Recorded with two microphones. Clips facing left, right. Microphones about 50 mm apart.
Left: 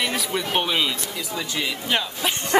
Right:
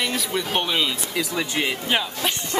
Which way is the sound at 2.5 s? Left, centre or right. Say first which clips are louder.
Left 7 dB; left.